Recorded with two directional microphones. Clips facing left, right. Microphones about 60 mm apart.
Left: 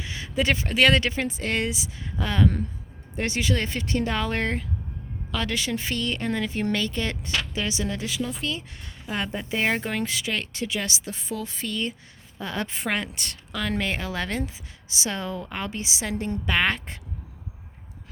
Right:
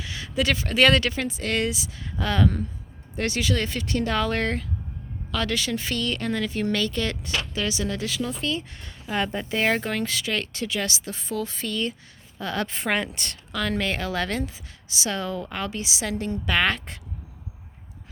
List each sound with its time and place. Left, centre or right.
0.0 s a sound: left
0.7 s speech: centre
1.0 s a woman's voice: left
8.2 s a woman's voice: centre
12.8 s a woman's voice: centre; by 17.0 s left